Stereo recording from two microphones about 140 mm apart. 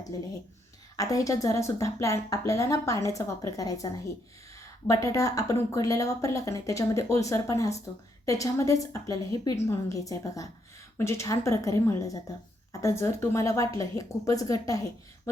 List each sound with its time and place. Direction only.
0.9 s speech: 25° left (ahead or behind)